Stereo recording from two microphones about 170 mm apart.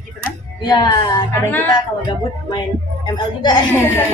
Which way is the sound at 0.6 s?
25° left (ahead or behind).